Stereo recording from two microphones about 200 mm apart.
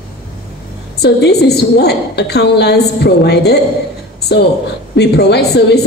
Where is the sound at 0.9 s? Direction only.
55° left (ahead or behind).